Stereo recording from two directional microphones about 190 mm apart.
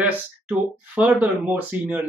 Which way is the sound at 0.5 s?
10° right (ahead or behind).